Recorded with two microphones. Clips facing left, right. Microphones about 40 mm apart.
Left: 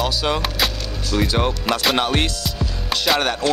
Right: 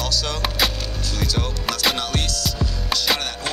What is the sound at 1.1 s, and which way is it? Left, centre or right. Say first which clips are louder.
Speech: left 7 dB; left.